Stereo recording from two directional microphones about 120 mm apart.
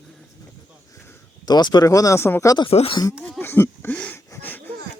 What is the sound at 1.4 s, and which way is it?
Speech, 35° left (ahead or behind).